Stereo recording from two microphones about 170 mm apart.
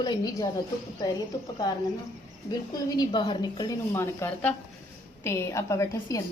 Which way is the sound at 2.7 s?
25° left (ahead or behind).